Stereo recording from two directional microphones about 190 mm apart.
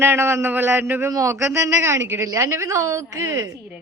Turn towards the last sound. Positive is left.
turn(degrees=-20)  # may be behind; listen again after turning